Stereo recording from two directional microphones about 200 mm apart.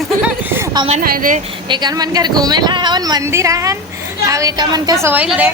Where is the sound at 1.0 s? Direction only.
45° right (ahead or behind).